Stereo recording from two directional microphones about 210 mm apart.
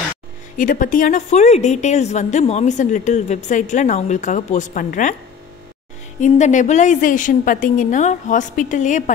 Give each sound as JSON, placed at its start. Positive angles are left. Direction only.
{"t": 0.6, "sound": "a woman's voice", "side_deg": 40}
{"t": 6.2, "sound": "a woman's voice", "side_deg": 35}